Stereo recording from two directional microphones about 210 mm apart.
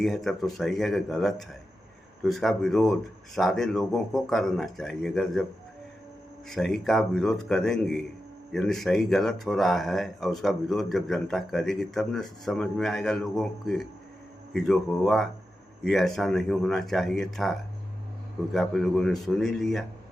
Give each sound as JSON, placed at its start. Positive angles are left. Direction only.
{"t": 0.0, "sound": "speech", "side_deg": 0}
{"t": 6.5, "sound": "speech", "side_deg": 0}